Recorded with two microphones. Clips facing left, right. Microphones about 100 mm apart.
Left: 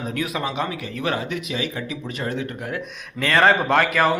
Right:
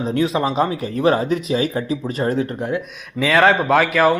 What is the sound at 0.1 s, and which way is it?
Speech, 30° right (ahead or behind).